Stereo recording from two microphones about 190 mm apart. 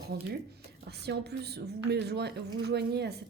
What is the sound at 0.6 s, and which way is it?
A woman's voice, 60° right (ahead or behind).